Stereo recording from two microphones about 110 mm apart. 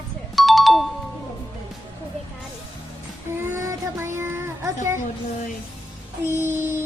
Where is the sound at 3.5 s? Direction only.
25° right (ahead or behind).